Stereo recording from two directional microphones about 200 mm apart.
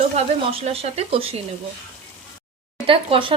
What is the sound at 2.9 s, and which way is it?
Speech, 25° right (ahead or behind).